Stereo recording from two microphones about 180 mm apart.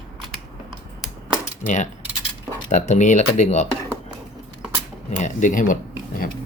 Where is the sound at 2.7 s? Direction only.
40° left (ahead or behind).